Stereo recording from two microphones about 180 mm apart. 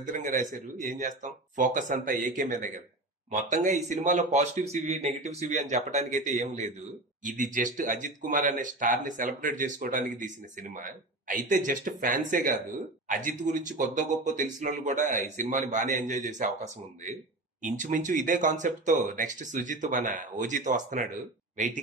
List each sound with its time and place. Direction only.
0.0 s a man's voice: 45° right (ahead or behind)